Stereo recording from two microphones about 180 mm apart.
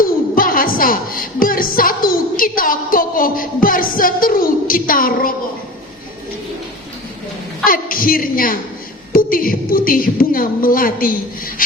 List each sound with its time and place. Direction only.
0.0 s music: 50° left (ahead or behind)
7.6 s a woman's voice: 50° left (ahead or behind)